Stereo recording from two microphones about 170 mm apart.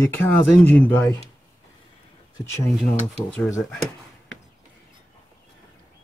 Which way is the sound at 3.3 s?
15° left (ahead or behind).